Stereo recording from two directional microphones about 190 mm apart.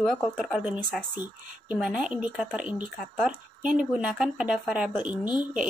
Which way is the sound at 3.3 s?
45° right (ahead or behind).